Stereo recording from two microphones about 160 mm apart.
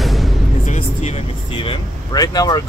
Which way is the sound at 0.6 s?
45° left (ahead or behind).